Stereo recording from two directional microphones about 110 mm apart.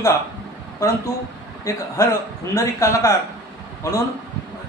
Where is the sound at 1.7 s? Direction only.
25° left (ahead or behind).